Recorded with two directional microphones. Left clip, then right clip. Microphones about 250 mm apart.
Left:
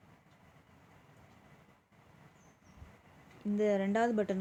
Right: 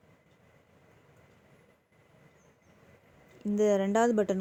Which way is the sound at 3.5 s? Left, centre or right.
Right.